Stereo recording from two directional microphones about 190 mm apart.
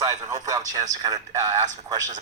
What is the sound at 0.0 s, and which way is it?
Speech, 15° right (ahead or behind).